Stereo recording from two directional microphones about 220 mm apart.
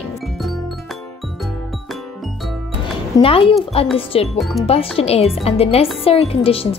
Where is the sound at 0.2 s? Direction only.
Centre (ahead or behind).